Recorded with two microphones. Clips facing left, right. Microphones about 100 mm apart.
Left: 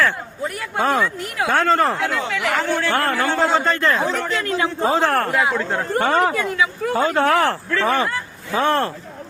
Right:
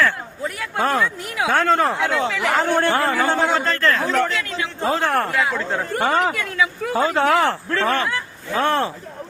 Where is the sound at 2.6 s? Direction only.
50° right (ahead or behind).